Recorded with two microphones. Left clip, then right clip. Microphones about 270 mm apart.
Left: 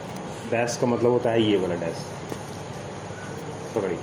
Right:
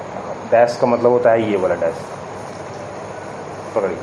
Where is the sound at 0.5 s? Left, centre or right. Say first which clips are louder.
Right 11 dB; left.